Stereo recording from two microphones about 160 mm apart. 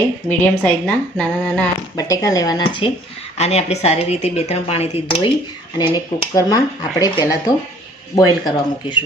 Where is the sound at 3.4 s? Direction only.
40° left (ahead or behind); by 9.0 s 25° left (ahead or behind).